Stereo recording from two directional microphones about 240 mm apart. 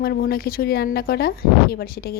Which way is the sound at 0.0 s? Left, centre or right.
Left.